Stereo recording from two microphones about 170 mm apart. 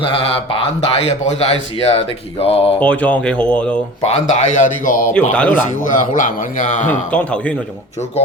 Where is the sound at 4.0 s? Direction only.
40° left (ahead or behind).